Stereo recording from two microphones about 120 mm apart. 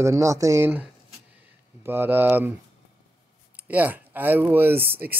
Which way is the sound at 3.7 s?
15° right (ahead or behind).